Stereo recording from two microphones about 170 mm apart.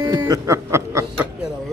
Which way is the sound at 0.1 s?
20° right (ahead or behind).